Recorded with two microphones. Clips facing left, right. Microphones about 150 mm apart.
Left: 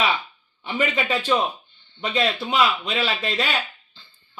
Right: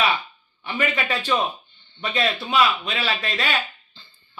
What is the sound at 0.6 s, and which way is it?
A man's voice, 20° left (ahead or behind).